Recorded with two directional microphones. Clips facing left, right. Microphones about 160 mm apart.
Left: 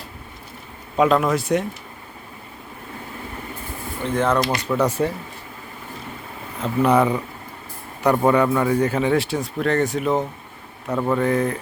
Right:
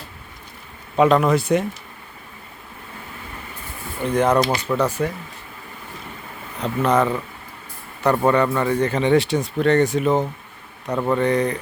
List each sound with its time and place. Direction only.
0.9 s speech: centre (ahead or behind)
4.0 s speech: 15° right (ahead or behind)
4.9 s speech: 30° left (ahead or behind)
6.6 s speech: 10° left (ahead or behind)